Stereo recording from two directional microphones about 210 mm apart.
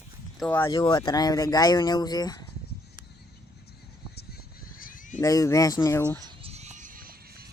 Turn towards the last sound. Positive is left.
turn(degrees=-45)  # may be behind; listen again after turning